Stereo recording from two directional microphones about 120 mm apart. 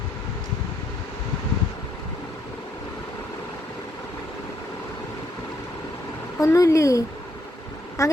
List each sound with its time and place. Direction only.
6.4 s speech: 25° left (ahead or behind)